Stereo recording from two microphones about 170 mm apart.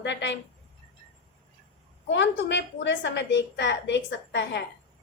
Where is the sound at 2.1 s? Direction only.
90° left.